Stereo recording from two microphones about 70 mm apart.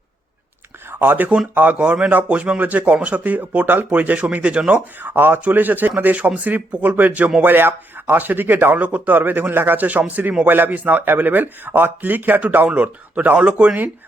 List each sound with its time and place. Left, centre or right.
0.9 s a man's voice: right